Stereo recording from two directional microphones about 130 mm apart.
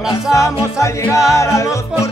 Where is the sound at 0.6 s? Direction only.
25° left (ahead or behind).